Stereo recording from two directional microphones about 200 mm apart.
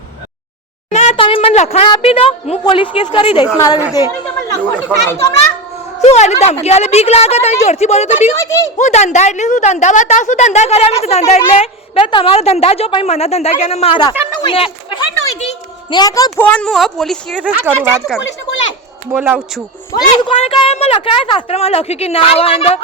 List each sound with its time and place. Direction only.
0.9 s a woman's voice: 30° left (ahead or behind)
4.4 s speech: 10° left (ahead or behind)
6.0 s a woman's voice: 35° left (ahead or behind)
8.4 s speech: 15° left (ahead or behind)
8.8 s a woman's voice: 35° left (ahead or behind)
15.4 s a sound: 25° left (ahead or behind)
16.4 s a woman's voice: 5° left (ahead or behind)
18.2 s speech: 60° left (ahead or behind)
19.1 s speech: 10° right (ahead or behind)
19.9 s a woman's voice: 25° left (ahead or behind)